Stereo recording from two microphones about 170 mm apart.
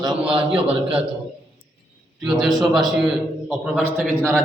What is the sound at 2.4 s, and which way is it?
A man's voice, centre (ahead or behind).